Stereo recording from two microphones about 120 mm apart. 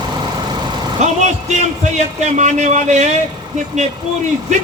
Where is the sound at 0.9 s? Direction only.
80° right.